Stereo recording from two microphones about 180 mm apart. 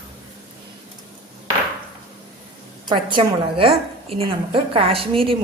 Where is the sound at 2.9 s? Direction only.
25° right (ahead or behind).